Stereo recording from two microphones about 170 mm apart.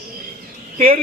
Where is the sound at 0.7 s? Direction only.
55° right (ahead or behind).